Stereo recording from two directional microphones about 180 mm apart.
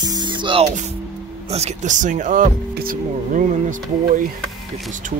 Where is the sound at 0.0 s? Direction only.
25° right (ahead or behind).